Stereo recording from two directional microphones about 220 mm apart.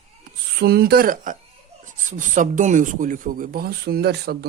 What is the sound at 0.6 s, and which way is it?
A woman's voice, 45° right (ahead or behind).